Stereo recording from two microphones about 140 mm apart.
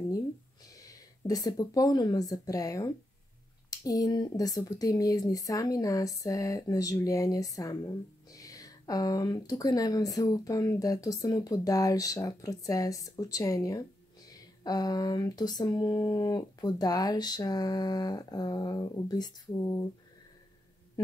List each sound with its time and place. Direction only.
0.8 s a woman's voice: 25° left (ahead or behind)